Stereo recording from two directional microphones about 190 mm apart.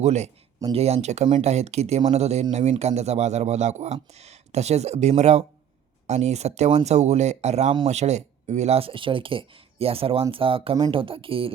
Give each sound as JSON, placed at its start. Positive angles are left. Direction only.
{"t": 0.0, "sound": "speech", "side_deg": -35}